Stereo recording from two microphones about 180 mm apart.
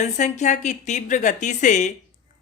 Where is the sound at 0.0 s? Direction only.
40° left (ahead or behind).